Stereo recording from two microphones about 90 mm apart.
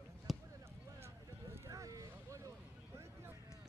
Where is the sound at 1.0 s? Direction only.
30° right (ahead or behind).